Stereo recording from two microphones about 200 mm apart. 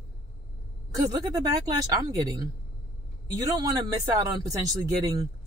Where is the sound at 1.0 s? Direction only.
15° right (ahead or behind).